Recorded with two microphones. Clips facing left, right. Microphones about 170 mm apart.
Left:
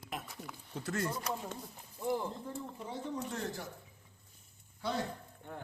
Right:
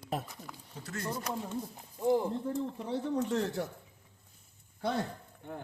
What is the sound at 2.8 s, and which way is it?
Speech, 70° right (ahead or behind).